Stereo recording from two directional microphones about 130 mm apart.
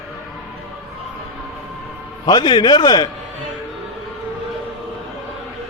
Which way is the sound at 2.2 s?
35° left (ahead or behind).